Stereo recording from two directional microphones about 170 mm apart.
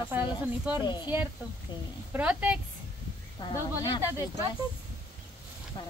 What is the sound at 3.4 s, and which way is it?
Speech, 25° left (ahead or behind).